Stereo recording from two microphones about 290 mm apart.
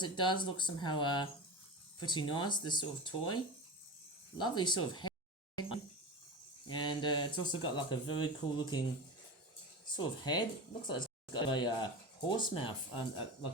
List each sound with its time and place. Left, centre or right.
0.0 s speech: centre
5.5 s a sound: centre
6.7 s speech: centre
9.9 s speech: centre